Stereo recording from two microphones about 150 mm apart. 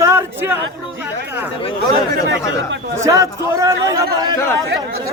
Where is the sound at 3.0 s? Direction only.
20° right (ahead or behind).